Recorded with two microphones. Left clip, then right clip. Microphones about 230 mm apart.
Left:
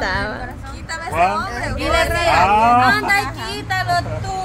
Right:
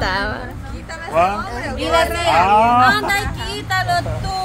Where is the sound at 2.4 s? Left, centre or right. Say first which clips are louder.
Even; centre.